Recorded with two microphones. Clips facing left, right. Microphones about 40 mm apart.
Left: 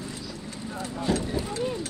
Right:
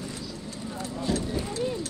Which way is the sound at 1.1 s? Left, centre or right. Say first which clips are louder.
Left 2 dB; left.